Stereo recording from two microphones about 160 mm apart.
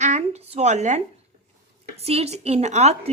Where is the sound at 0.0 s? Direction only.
45° right (ahead or behind).